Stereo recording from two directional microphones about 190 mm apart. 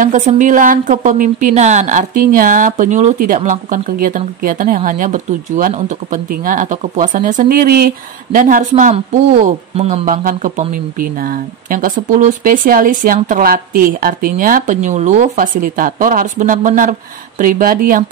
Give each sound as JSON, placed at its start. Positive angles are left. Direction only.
{"t": 0.0, "sound": "a woman's voice", "side_deg": -40}
{"t": 8.9, "sound": "a woman's voice", "side_deg": -35}